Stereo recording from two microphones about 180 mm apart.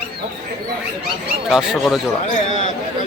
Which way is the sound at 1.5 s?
Centre (ahead or behind).